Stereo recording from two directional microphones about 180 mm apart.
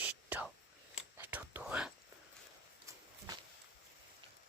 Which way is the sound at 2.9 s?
15° right (ahead or behind).